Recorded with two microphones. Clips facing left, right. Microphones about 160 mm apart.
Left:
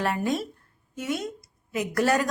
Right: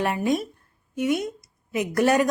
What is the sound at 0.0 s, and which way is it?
A woman's voice, 15° right (ahead or behind).